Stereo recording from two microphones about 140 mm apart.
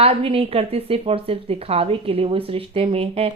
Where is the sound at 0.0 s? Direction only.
40° right (ahead or behind).